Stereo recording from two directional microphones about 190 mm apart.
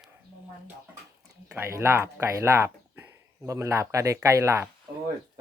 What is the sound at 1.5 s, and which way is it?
Speech, 15° right (ahead or behind).